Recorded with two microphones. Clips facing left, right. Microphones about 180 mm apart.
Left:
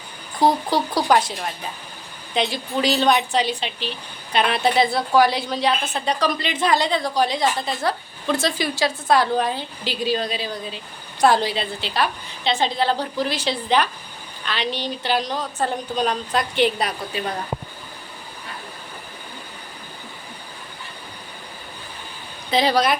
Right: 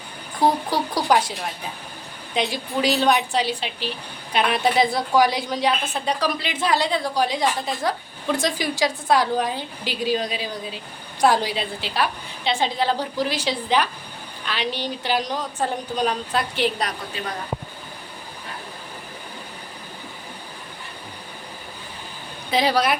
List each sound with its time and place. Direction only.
0.7 s a woman's voice: 10° right (ahead or behind)
2.3 s a woman's voice: 10° right (ahead or behind)
22.4 s a woman's voice: 10° right (ahead or behind)